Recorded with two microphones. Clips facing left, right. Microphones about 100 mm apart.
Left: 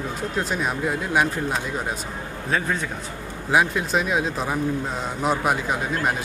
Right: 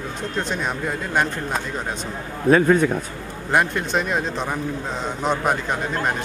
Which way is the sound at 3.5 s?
5° left (ahead or behind).